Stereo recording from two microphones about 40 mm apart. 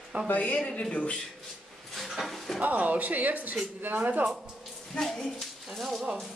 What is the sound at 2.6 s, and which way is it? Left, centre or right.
Speech, right.